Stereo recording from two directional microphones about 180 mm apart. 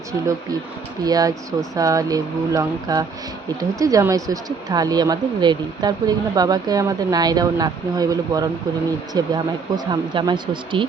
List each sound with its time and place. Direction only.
1.0 s speech: 20° right (ahead or behind)